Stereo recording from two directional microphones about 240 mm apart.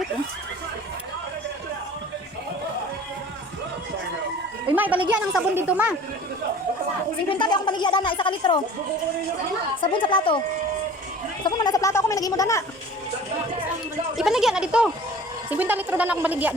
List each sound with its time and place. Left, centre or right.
4.7 s a sound: centre
5.3 s speech: centre
7.3 s a woman's voice: centre
9.8 s a woman's voice: centre
11.4 s speech: centre
14.2 s speech: centre